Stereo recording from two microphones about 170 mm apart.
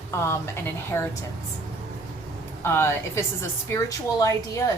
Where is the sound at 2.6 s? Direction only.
15° left (ahead or behind).